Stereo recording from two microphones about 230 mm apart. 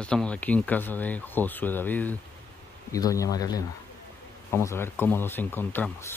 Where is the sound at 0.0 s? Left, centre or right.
Centre.